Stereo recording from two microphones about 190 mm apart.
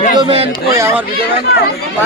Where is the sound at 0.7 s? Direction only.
15° right (ahead or behind).